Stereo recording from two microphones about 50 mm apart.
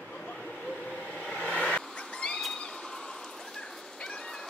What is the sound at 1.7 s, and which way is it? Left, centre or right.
Cat, centre.